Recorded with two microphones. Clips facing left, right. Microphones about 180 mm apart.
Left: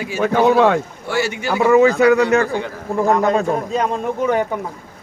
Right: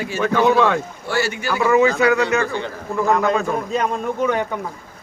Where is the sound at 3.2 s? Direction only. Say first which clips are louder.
Left 3 dB; 35° left (ahead or behind).